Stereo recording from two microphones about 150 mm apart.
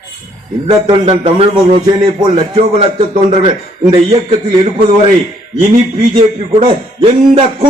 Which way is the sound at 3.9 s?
35° right (ahead or behind).